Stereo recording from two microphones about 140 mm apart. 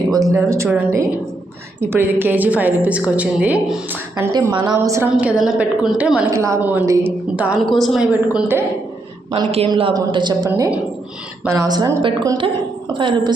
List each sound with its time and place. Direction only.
0.1 s a woman's voice: 25° right (ahead or behind); by 3.8 s 10° right (ahead or behind)
4.3 s a woman's voice: 25° right (ahead or behind)
5.1 s a woman's voice: 5° right (ahead or behind)
6.3 s a woman's voice: 20° right (ahead or behind)
7.6 s a woman's voice: centre (ahead or behind)
9.3 s a woman's voice: 45° right (ahead or behind)